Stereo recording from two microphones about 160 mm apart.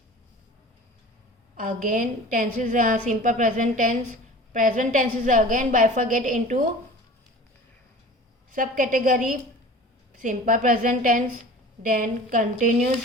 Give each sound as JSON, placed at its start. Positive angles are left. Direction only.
{"t": 1.5, "sound": "a woman's voice", "side_deg": -55}
{"t": 8.5, "sound": "a woman's voice", "side_deg": -60}